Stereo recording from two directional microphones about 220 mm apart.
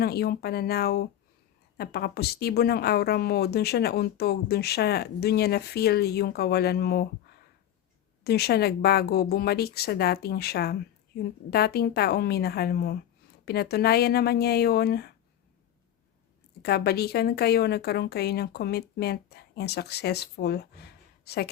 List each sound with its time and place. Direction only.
0.0 s speech: 45° left (ahead or behind)
16.6 s speech: 45° left (ahead or behind)